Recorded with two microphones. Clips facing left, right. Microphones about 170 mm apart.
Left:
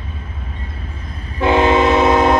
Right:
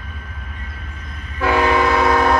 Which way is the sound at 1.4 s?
20° left (ahead or behind).